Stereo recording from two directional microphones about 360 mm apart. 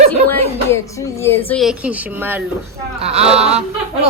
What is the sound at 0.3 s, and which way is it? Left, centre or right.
Speech, centre.